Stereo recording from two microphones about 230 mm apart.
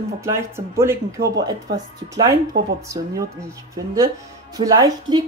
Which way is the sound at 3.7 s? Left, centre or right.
Centre.